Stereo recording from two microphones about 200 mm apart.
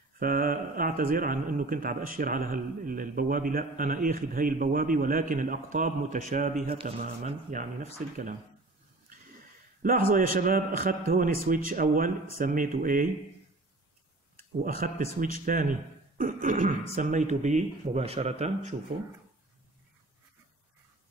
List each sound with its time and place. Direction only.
0.2 s a man's voice: 45° right (ahead or behind)
9.8 s speech: 45° right (ahead or behind)
14.6 s a man's voice: 45° right (ahead or behind)